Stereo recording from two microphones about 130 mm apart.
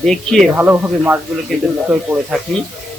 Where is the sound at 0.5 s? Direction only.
10° right (ahead or behind).